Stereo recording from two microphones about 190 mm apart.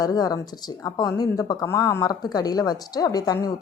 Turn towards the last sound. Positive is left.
turn(degrees=20)  # may be behind; listen again after turning